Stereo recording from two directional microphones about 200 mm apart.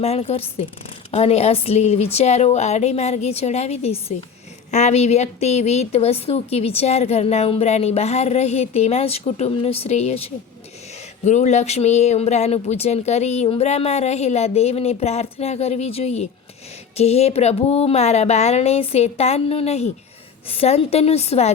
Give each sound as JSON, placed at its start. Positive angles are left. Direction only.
{"t": 0.0, "sound": "a woman's voice", "side_deg": 30}
{"t": 11.3, "sound": "a woman's voice", "side_deg": 35}